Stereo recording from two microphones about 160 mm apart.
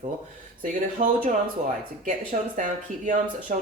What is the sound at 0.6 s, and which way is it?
Speech, 55° right (ahead or behind).